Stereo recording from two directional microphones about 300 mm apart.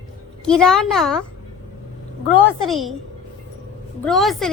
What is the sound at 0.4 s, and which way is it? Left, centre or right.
Speech, centre.